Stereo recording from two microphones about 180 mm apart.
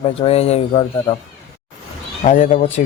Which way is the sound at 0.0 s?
35° left (ahead or behind).